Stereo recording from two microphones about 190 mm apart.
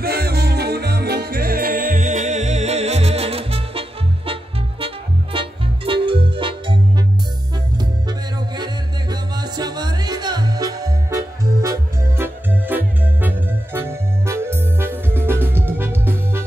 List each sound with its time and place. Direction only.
0.0 s music: 55° right (ahead or behind); by 6.8 s 25° right (ahead or behind)
9.1 s music: 20° right (ahead or behind)